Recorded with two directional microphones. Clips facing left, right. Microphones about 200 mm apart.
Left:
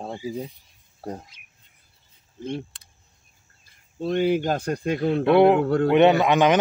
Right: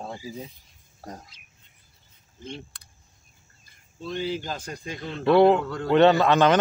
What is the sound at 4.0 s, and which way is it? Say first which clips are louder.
Speech: left 8 dB; 60° left (ahead or behind).